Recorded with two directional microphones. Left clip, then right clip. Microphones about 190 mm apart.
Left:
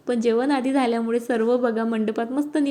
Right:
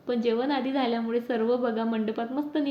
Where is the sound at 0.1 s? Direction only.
45° left (ahead or behind).